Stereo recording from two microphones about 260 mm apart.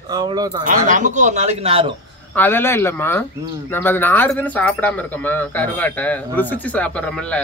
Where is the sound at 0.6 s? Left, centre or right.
Right.